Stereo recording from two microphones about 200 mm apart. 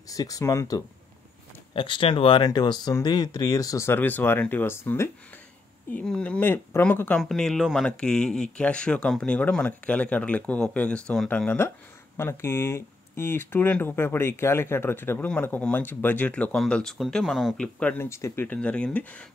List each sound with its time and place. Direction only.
0.1 s speech: 15° left (ahead or behind)